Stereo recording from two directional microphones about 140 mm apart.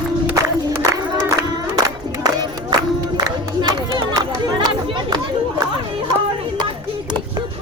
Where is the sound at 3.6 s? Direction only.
30° right (ahead or behind).